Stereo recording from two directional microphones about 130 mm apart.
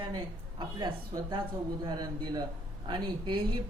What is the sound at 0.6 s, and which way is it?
Speech, 35° right (ahead or behind).